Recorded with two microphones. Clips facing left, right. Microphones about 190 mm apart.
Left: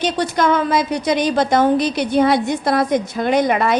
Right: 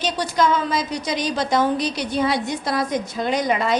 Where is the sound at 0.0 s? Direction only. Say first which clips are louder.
Left 3 dB; 55° left (ahead or behind).